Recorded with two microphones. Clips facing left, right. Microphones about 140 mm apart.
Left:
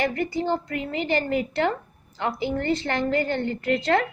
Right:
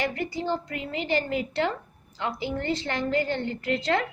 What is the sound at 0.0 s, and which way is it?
A woman's voice, 55° left (ahead or behind).